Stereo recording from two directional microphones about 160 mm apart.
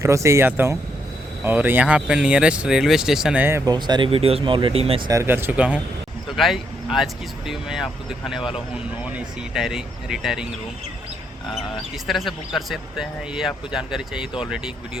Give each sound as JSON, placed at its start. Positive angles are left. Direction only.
{"t": 0.0, "sound": "speech", "side_deg": -20}
{"t": 3.7, "sound": "speech", "side_deg": -25}
{"t": 5.1, "sound": "speech", "side_deg": -15}
{"t": 9.1, "sound": "speech", "side_deg": -5}
{"t": 12.0, "sound": "speech", "side_deg": 0}